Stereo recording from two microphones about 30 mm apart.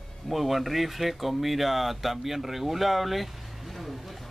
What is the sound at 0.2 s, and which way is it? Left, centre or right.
Speech, centre.